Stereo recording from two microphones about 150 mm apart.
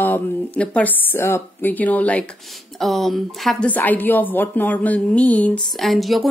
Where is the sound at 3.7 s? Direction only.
10° left (ahead or behind).